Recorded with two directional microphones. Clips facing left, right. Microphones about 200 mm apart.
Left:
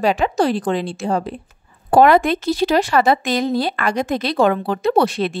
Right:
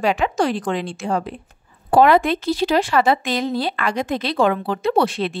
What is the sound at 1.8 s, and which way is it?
Speech, 45° left (ahead or behind).